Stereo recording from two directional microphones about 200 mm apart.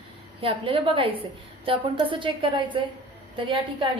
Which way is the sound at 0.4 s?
25° right (ahead or behind).